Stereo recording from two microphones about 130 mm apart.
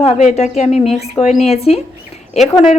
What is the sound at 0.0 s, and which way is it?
A woman's voice, 55° left (ahead or behind).